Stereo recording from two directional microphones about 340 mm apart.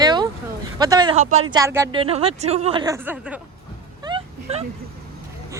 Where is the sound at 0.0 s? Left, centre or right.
Centre.